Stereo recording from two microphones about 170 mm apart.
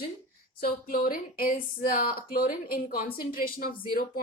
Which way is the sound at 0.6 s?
60° left (ahead or behind).